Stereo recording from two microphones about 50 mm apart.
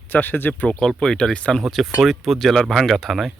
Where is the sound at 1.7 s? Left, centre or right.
Centre.